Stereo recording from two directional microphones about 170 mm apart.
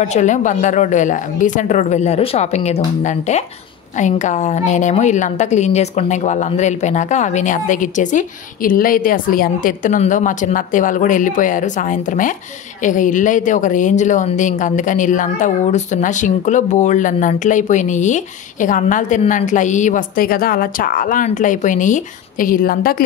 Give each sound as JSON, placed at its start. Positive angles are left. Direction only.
{"t": 0.0, "sound": "a woman's voice", "side_deg": 45}